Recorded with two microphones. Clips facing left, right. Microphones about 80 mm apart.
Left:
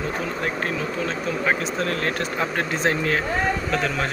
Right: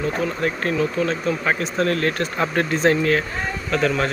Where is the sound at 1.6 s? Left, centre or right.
Centre.